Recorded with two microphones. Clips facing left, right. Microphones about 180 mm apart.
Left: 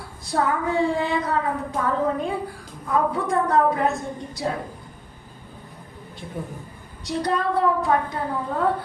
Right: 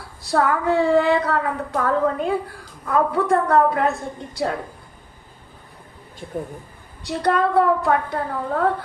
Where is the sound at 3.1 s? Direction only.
60° right (ahead or behind).